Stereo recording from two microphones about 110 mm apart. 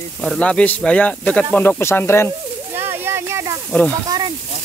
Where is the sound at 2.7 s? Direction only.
20° right (ahead or behind).